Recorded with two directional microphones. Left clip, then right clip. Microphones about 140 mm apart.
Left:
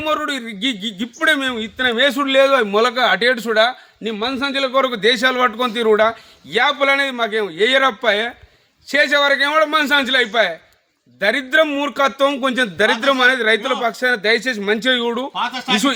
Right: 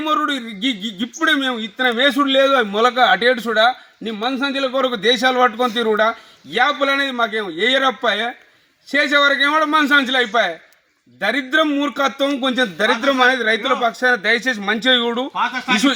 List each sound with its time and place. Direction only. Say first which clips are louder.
0.0 s speech: right 1 dB; 15° left (ahead or behind)
15.3 s speech: right 1 dB; 15° right (ahead or behind)